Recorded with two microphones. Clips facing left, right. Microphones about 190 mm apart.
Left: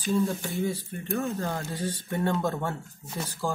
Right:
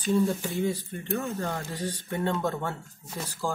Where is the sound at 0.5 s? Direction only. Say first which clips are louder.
Right 1 dB; centre (ahead or behind).